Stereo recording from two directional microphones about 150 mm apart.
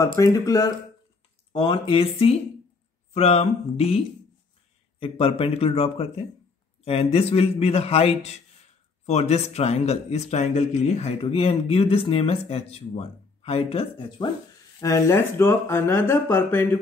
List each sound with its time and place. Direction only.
0.2 s speech: 25° left (ahead or behind)
1.5 s a man's voice: 35° left (ahead or behind)
5.0 s a man's voice: 40° left (ahead or behind)
14.8 s speech: 20° left (ahead or behind)